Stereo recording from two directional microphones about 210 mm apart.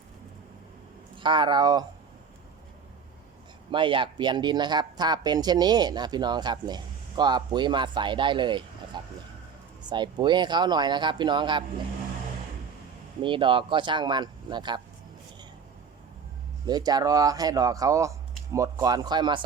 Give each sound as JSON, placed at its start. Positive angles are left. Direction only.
{"t": 1.1, "sound": "speech", "side_deg": -25}
{"t": 3.7, "sound": "speech", "side_deg": -25}
{"t": 8.9, "sound": "a sound", "side_deg": -20}
{"t": 9.8, "sound": "speech", "side_deg": -20}
{"t": 13.2, "sound": "speech", "side_deg": -25}
{"t": 16.6, "sound": "speech", "side_deg": -20}